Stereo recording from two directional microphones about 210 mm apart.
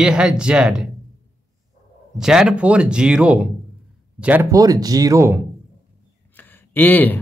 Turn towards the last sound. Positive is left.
turn(degrees=10)  # may be behind; listen again after turning